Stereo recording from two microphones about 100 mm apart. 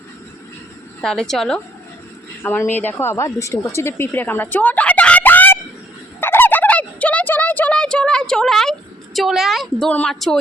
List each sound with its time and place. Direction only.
1.0 s a woman's voice: 5° left (ahead or behind)
2.4 s speech: 20° left (ahead or behind)
6.1 s fowl: 20° left (ahead or behind); by 8.7 s 5° left (ahead or behind)
9.1 s a woman's voice: 5° right (ahead or behind)